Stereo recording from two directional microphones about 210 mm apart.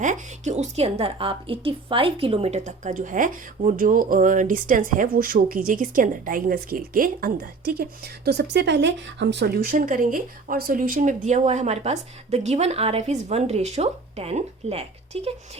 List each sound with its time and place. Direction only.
0.0 s a woman's voice: 35° right (ahead or behind)